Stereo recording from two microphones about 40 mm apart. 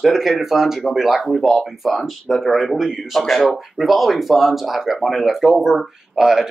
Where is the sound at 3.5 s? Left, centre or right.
Centre.